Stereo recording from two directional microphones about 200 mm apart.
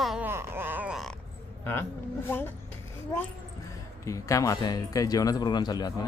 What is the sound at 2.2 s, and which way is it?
Speech, 10° left (ahead or behind).